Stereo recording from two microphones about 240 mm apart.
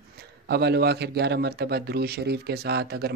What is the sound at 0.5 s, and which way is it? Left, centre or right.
A man's voice, right.